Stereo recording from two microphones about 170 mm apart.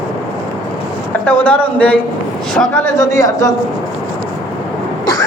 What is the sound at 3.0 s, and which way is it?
Speech, 20° left (ahead or behind).